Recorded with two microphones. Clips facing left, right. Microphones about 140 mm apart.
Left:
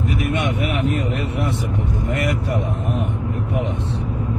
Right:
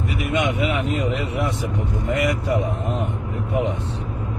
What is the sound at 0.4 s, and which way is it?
Speech, 20° right (ahead or behind).